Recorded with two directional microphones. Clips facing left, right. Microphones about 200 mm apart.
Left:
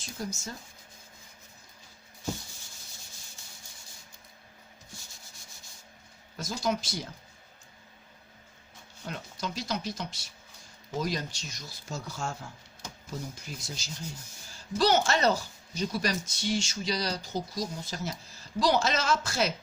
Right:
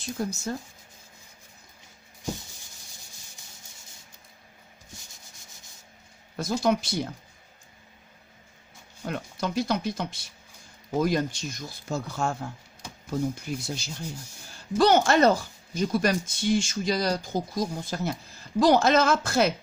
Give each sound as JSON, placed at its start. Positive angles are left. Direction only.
{"t": 0.0, "sound": "speech", "side_deg": -60}
{"t": 6.3, "sound": "speech", "side_deg": -60}
{"t": 9.0, "sound": "speech", "side_deg": -55}